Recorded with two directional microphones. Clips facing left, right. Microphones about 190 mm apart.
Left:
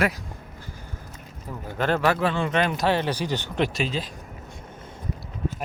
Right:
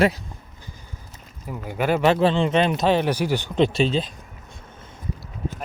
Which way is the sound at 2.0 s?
25° right (ahead or behind).